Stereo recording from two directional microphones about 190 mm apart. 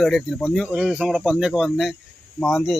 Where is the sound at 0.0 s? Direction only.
Centre (ahead or behind).